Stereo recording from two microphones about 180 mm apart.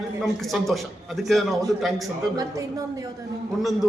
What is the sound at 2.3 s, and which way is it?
Speech, 20° right (ahead or behind).